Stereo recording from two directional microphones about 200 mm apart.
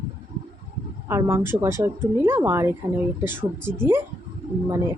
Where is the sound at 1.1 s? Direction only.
10° right (ahead or behind).